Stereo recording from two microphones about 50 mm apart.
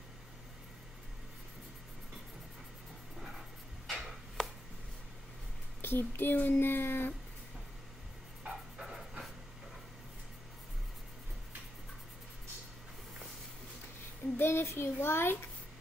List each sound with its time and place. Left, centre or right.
3.8 s chopping: centre
5.8 s speech: left
8.5 s music: centre
14.3 s a child's voice: left